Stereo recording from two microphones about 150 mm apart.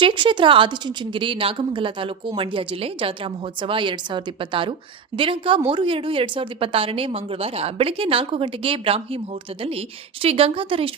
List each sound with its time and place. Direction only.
0.0 s a woman's voice: 30° right (ahead or behind)
10.2 s a woman's voice: 40° right (ahead or behind)